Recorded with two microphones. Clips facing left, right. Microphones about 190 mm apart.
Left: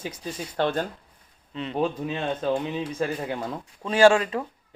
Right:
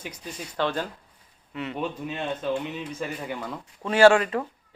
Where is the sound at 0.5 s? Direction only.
50° left (ahead or behind).